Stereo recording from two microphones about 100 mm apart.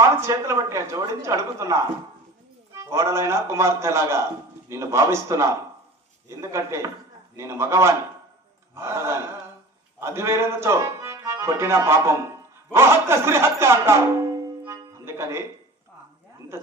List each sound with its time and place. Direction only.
0.0 s a woman's voice: 30° right (ahead or behind)
14.6 s music: 25° right (ahead or behind)